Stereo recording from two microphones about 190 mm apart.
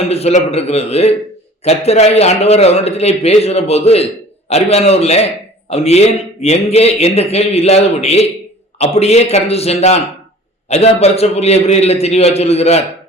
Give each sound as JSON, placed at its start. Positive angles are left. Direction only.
{"t": 0.1, "sound": "a man's voice", "side_deg": 35}